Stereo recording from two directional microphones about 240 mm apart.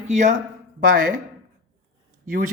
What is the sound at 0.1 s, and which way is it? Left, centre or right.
Speech, right.